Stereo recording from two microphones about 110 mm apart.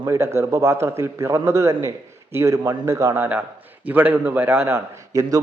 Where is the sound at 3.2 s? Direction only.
15° right (ahead or behind).